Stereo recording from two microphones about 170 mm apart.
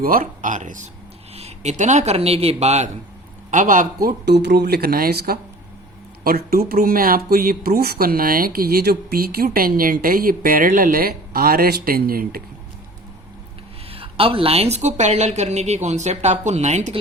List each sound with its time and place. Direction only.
0.0 s a man's voice: 55° right (ahead or behind)
4.3 s speech: 80° right; by 12.4 s 60° right (ahead or behind)
13.9 s a woman's voice: 35° right (ahead or behind)